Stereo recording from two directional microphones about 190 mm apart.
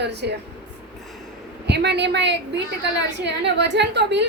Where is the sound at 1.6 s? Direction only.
60° right (ahead or behind).